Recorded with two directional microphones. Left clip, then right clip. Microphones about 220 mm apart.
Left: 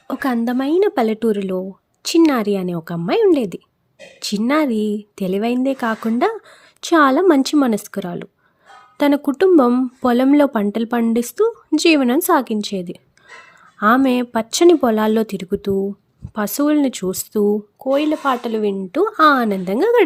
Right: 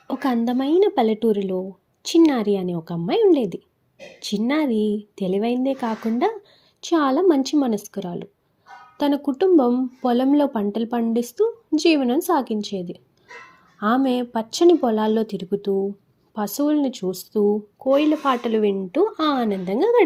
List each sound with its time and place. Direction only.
0.1 s speech: 20° left (ahead or behind)